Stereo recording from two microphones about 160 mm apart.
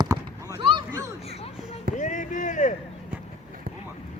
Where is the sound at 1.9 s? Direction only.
50° left (ahead or behind).